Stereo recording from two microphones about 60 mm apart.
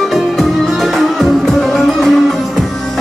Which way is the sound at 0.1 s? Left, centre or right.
Centre.